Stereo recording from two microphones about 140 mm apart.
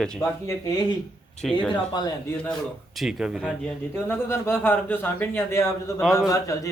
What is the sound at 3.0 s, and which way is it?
Speech, centre (ahead or behind).